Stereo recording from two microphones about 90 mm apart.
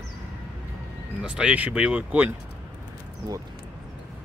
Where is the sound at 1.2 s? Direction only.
10° right (ahead or behind).